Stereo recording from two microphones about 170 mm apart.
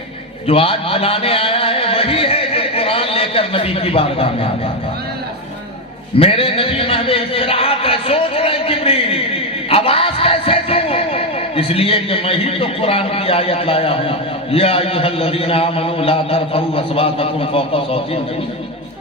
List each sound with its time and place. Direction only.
0.4 s a man's voice: 35° left (ahead or behind)
6.1 s a man's voice: 35° left (ahead or behind)